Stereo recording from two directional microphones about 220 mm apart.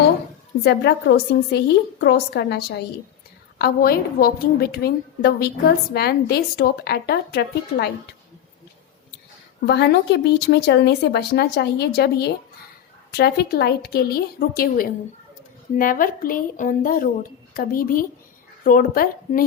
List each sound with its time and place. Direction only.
0.6 s speech: 50° left (ahead or behind)
9.6 s a woman's voice: 50° left (ahead or behind)